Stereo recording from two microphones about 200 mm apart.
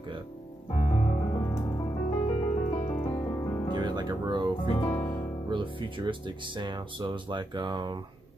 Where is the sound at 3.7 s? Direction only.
20° right (ahead or behind).